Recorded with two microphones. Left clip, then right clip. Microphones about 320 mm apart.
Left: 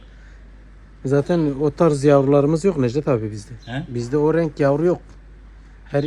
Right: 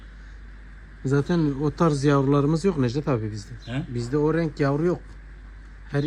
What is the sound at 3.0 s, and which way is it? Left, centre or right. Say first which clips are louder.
Speech: left 6 dB; left.